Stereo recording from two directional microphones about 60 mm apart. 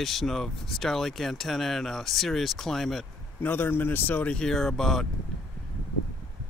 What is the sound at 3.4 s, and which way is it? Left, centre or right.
Speech, left.